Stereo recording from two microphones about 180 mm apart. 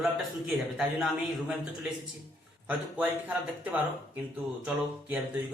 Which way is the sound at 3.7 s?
10° right (ahead or behind).